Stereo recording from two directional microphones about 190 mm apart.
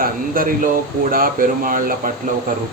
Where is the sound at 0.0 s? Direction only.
50° right (ahead or behind).